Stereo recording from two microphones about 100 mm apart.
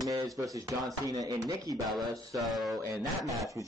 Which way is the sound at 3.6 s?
30° right (ahead or behind).